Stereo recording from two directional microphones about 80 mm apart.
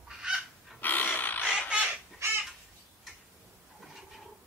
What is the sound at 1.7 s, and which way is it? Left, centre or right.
Crow, centre.